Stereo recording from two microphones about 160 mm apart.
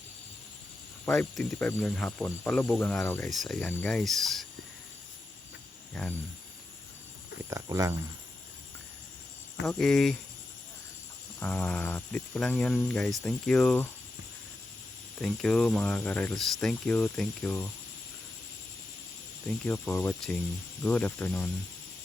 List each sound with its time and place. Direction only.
1.0 s speech: 5° left (ahead or behind)
5.9 s speech: 5° left (ahead or behind)
7.5 s speech: 20° right (ahead or behind)
9.6 s speech: centre (ahead or behind)
11.3 s speech: 10° left (ahead or behind)
15.2 s speech: 5° left (ahead or behind)
19.6 s speech: 10° left (ahead or behind)